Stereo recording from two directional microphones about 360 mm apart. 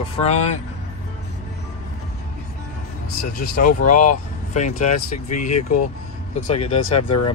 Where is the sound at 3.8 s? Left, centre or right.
Left.